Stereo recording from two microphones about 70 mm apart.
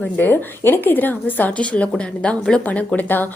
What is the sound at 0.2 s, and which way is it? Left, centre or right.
Speech, left.